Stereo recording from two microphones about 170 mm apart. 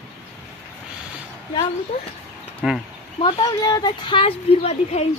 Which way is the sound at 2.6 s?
5° right (ahead or behind).